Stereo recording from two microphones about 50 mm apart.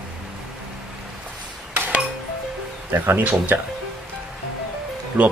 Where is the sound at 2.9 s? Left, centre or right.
Right.